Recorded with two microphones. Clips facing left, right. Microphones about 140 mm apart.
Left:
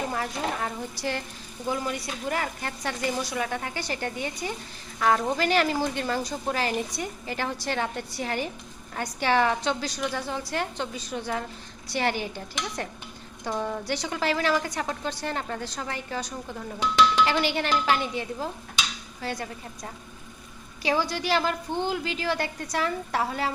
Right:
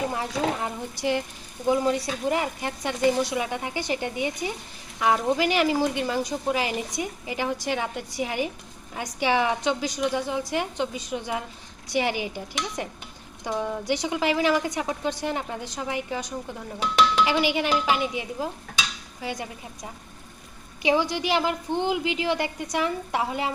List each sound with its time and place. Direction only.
0.1 s speech: 15° right (ahead or behind)
17.2 s speech: 10° right (ahead or behind)